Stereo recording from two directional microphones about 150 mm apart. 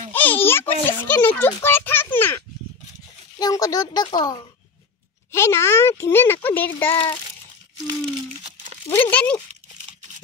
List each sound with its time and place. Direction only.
0.1 s a child's voice: 10° left (ahead or behind)
3.3 s speech: 25° left (ahead or behind)
8.8 s speech: 15° left (ahead or behind)